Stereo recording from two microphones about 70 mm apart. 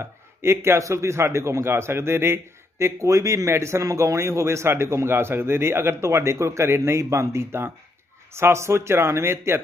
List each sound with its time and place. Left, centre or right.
0.0 s a man's voice: right